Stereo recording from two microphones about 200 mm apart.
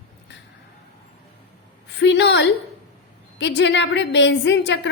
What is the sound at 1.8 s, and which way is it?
A woman's voice, 60° left (ahead or behind).